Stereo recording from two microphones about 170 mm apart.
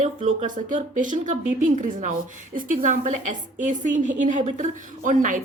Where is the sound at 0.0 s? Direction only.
45° right (ahead or behind).